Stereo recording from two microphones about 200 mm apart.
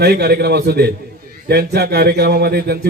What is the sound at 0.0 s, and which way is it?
A man's voice, 55° right (ahead or behind).